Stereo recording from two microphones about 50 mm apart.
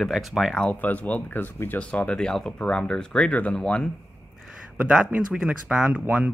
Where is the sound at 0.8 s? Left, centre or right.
Left.